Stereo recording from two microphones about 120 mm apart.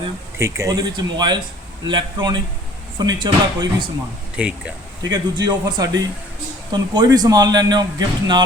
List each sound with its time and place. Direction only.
0.3 s speech: 25° right (ahead or behind)
0.9 s a man's voice: 40° right (ahead or behind)
4.4 s speech: 10° right (ahead or behind)
5.1 s a man's voice: 40° right (ahead or behind)